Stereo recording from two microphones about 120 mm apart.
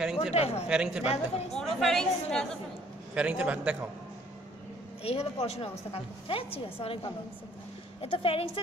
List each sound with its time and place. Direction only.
0.0 s a woman's voice: 5° right (ahead or behind)
0.3 s a woman's voice: 60° left (ahead or behind)
0.7 s a man's voice: 5° right (ahead or behind)
1.0 s a woman's voice: 60° left (ahead or behind)
1.8 s a woman's voice: 5° left (ahead or behind)
3.2 s a man's voice: 10° right (ahead or behind)
5.0 s a woman's voice: 55° left (ahead or behind)